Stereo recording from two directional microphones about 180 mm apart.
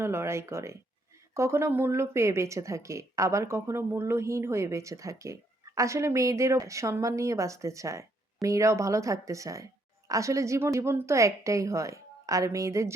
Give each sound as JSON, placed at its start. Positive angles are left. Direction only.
{"t": 0.0, "sound": "speech", "side_deg": -15}